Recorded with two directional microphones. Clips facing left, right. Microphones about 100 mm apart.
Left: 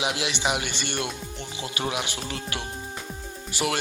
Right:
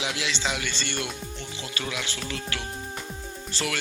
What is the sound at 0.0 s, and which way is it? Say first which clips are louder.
A man's voice: left 3 dB; 20° left (ahead or behind).